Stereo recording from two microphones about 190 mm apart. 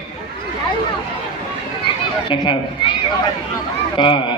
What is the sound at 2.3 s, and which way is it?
Speech, 25° left (ahead or behind).